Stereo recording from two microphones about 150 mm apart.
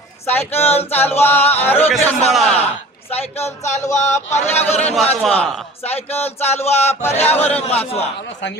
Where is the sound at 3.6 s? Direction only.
50° left (ahead or behind).